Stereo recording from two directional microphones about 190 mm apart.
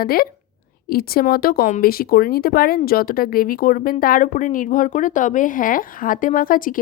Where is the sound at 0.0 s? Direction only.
50° left (ahead or behind).